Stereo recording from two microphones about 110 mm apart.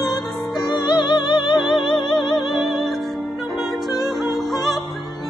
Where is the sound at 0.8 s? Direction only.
45° left (ahead or behind).